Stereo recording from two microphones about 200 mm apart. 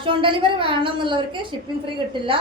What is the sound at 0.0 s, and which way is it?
A woman's voice, 25° right (ahead or behind).